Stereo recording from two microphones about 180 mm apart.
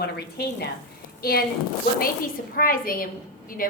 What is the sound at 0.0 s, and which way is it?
A woman's voice, 65° left (ahead or behind).